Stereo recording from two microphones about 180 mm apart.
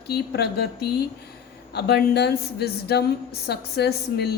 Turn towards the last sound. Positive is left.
turn(degrees=65)  # may be behind; listen again after turning